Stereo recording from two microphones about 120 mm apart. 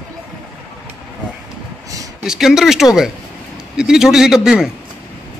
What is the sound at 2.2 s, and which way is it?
Speech, centre (ahead or behind).